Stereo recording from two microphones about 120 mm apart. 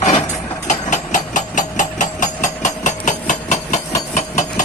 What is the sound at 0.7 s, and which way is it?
Hammer, 90° left.